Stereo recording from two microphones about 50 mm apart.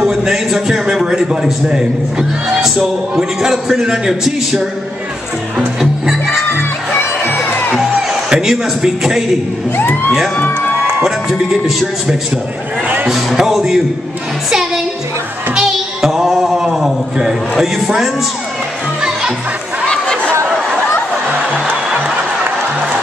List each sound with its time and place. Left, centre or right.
0.0 s a man's voice: centre
8.3 s speech: centre
9.8 s speech: left
11.0 s speech: centre
13.1 s music: centre
15.5 s child singing: centre
16.7 s a man's voice: centre
19.9 s chatter: centre
21.9 s applause: right